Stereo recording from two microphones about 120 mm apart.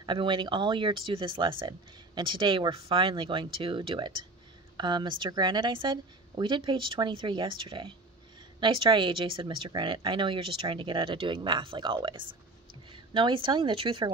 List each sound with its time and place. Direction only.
0.0 s speech: 40° right (ahead or behind)